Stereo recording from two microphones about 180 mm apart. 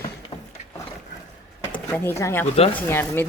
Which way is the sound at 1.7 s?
10° left (ahead or behind).